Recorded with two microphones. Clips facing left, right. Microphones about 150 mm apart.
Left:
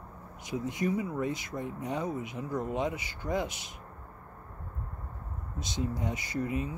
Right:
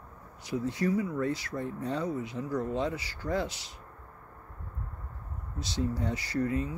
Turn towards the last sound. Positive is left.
turn(degrees=20)  # may be behind; listen again after turning